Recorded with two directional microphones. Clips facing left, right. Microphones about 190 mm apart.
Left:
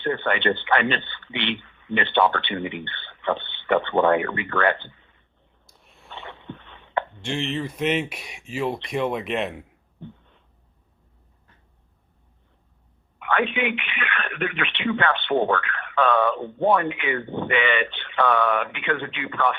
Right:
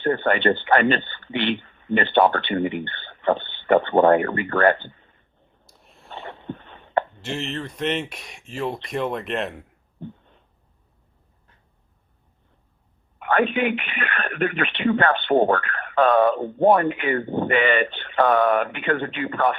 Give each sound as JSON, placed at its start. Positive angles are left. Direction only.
{"t": 0.0, "sound": "a woman's voice", "side_deg": -40}
{"t": 5.6, "sound": "a sound", "side_deg": 0}
{"t": 6.1, "sound": "a sound", "side_deg": -35}
{"t": 7.2, "sound": "speech", "side_deg": 0}
{"t": 10.0, "sound": "a woman's voice", "side_deg": -40}
{"t": 13.1, "sound": "a woman's voice", "side_deg": -40}